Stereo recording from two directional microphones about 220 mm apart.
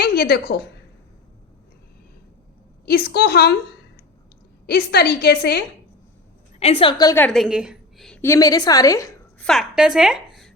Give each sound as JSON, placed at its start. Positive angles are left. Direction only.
{"t": 0.0, "sound": "a woman's voice", "side_deg": 45}
{"t": 2.8, "sound": "a woman's voice", "side_deg": 45}
{"t": 4.6, "sound": "a woman's voice", "side_deg": 45}
{"t": 6.6, "sound": "a woman's voice", "side_deg": 25}
{"t": 7.3, "sound": "a woman's voice", "side_deg": 0}
{"t": 9.5, "sound": "a woman's voice", "side_deg": 0}